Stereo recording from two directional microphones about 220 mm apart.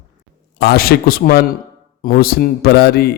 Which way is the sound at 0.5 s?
45° left (ahead or behind).